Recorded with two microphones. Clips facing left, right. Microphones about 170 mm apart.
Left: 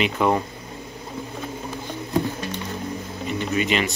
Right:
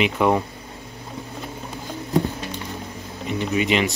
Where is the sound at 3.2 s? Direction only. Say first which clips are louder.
Right 2 dB; 15° right (ahead or behind).